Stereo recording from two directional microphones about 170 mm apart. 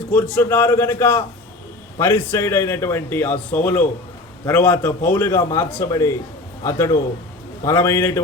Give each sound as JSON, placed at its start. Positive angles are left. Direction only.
{"t": 0.1, "sound": "a man's voice", "side_deg": 10}